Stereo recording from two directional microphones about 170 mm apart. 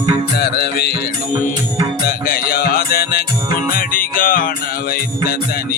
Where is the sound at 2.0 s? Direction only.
60° left (ahead or behind).